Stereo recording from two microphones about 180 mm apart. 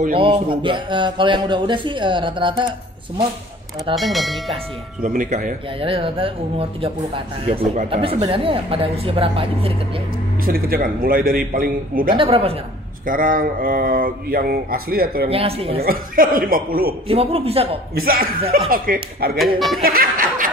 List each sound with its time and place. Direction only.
0.1 s speech: 30° right (ahead or behind)
3.9 s speech: centre (ahead or behind)
5.0 s speech: 45° right (ahead or behind)
5.8 s speech: 30° right (ahead or behind)
10.4 s speech: 50° right (ahead or behind)
12.2 s speech: 30° right (ahead or behind)
13.0 s speech: 50° right (ahead or behind)
15.2 s speech: 35° right (ahead or behind)
15.8 s speech: 55° right (ahead or behind)
17.1 s speech: 35° right (ahead or behind)
17.9 s speech: 55° right (ahead or behind)
19.3 s speech: centre (ahead or behind)
19.8 s speech: 55° right (ahead or behind)